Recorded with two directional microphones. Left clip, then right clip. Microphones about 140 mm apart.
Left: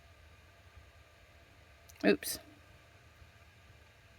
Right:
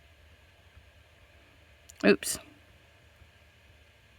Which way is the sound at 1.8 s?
50° right (ahead or behind).